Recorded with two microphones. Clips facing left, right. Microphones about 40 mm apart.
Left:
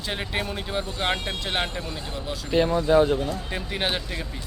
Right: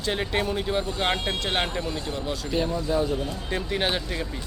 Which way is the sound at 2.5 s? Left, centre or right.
Left.